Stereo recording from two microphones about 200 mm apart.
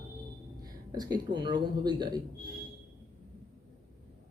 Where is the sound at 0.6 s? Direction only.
20° right (ahead or behind).